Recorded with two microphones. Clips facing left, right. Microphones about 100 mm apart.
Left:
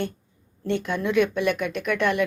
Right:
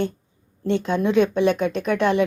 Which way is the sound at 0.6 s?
20° right (ahead or behind).